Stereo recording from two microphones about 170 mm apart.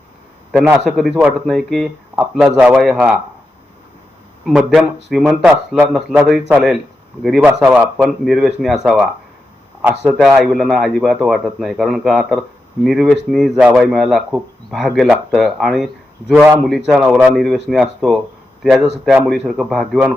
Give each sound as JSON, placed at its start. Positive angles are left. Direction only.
{"t": 0.5, "sound": "speech", "side_deg": -5}
{"t": 4.4, "sound": "speech", "side_deg": -5}
{"t": 10.1, "sound": "speech", "side_deg": 0}